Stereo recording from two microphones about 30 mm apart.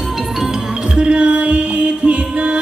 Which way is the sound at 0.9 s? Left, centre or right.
Right.